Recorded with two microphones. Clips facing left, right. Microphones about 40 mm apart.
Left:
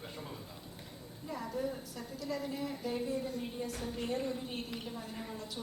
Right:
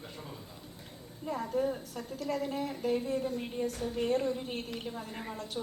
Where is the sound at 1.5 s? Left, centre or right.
Right.